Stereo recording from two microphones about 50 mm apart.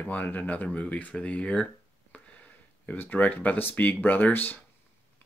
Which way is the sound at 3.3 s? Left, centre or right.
Left.